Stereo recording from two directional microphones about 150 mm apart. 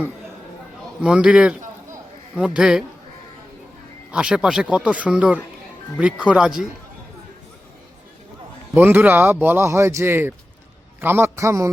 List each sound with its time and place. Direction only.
1.0 s speech: 5° right (ahead or behind)
4.1 s speech: 5° right (ahead or behind)
8.7 s a man's voice: 15° right (ahead or behind)